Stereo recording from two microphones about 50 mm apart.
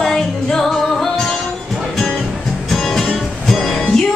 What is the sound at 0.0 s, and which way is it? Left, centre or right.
Music, centre.